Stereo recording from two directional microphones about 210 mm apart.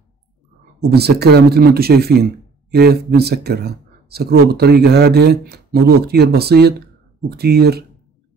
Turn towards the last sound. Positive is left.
turn(degrees=-50)  # may be behind; listen again after turning